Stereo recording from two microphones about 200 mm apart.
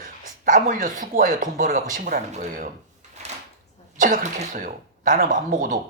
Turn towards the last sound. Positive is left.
turn(degrees=-40)  # may be behind; listen again after turning